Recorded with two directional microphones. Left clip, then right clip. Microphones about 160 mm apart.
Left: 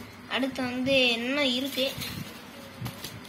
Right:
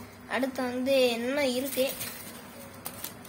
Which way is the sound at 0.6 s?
60° right (ahead or behind).